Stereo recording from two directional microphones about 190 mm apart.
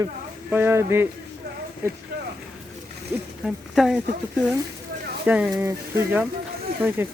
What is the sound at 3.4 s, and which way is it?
Speech, centre (ahead or behind).